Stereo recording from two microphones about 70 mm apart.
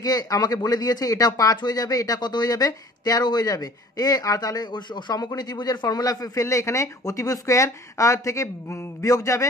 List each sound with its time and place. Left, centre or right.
0.0 s speech: left
6.4 s speech: left